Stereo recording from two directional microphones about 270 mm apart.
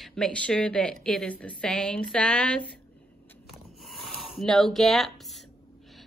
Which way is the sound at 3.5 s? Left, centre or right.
Centre.